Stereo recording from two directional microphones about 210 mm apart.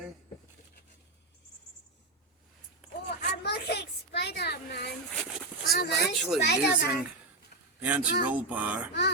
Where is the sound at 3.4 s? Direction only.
50° left (ahead or behind).